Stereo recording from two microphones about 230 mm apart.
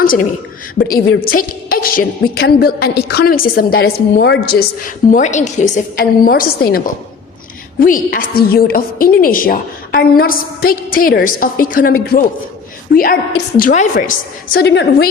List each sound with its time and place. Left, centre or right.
0.0 s a woman's voice: left
5.1 s a woman's voice: left